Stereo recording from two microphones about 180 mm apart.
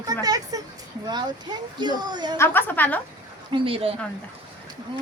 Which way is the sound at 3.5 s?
30° right (ahead or behind).